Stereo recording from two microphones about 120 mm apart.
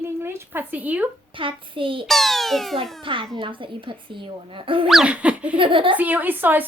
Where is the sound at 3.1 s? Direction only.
45° right (ahead or behind).